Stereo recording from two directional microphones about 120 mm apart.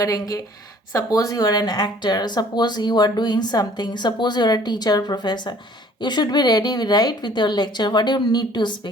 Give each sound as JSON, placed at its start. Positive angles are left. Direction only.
{"t": 0.0, "sound": "a woman's voice", "side_deg": 30}